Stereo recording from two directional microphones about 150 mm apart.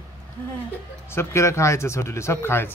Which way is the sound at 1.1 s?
15° left (ahead or behind).